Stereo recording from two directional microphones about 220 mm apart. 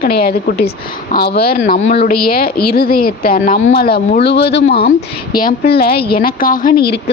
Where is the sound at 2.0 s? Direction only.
45° left (ahead or behind).